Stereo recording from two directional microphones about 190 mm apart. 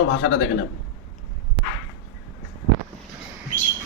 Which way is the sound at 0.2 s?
80° left.